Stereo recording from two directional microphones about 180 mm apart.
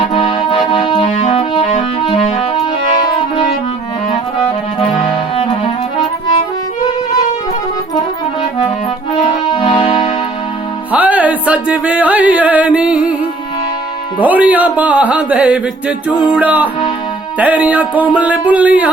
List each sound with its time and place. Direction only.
0.1 s music: 25° left (ahead or behind)
5.4 s music: 30° left (ahead or behind)
9.1 s music: 30° left (ahead or behind)
10.9 s music: 10° right (ahead or behind)
14.2 s music: 10° right (ahead or behind)
16.3 s speech: 10° right (ahead or behind)